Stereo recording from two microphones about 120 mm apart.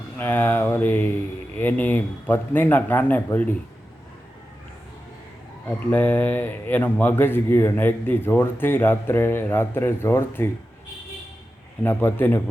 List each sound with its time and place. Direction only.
0.2 s speech: 15° left (ahead or behind)
5.6 s speech: 15° left (ahead or behind)
11.8 s speech: 15° left (ahead or behind)